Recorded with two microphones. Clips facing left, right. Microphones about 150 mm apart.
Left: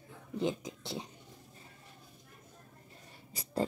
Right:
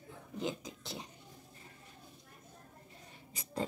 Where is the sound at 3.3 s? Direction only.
35° left (ahead or behind).